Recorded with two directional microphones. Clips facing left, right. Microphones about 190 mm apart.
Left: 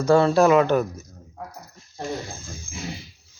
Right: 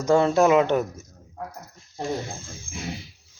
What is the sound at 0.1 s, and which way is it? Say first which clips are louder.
Speech: left 1 dB; 20° right (ahead or behind).